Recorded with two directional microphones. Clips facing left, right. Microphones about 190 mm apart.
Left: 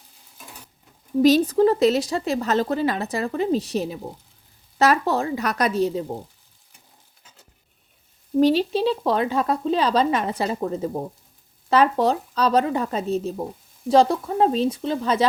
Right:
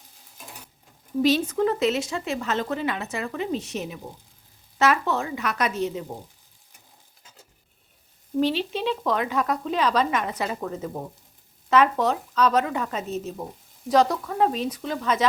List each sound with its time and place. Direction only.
1.2 s speech: 40° left (ahead or behind)
8.4 s speech: 40° left (ahead or behind)